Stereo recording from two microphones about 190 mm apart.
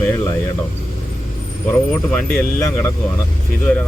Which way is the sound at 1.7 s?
5° left (ahead or behind).